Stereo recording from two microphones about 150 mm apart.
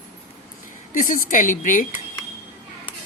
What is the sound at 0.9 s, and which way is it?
Speech, 65° left (ahead or behind).